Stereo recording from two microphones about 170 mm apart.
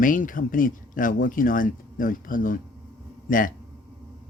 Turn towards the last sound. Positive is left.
turn(degrees=55)  # may be behind; listen again after turning